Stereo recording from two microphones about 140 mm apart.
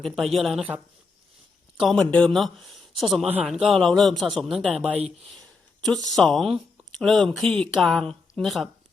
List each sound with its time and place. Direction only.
0.0 s speech: centre (ahead or behind)
1.8 s speech: 5° left (ahead or behind)